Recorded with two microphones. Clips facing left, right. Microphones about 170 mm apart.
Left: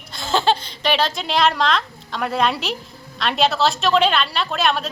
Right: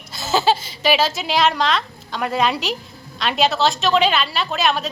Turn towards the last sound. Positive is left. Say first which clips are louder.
# even
turn(degrees=0)  # may be behind; listen again after turning